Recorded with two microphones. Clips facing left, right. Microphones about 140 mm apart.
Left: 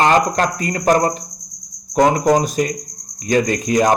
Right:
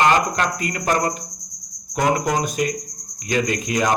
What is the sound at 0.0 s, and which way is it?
Speech, 35° left (ahead or behind).